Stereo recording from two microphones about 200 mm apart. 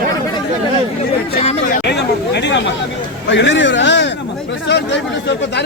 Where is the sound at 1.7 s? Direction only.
55° left (ahead or behind).